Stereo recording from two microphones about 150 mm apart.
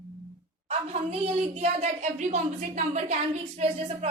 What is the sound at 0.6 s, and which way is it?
A woman's voice, 45° right (ahead or behind).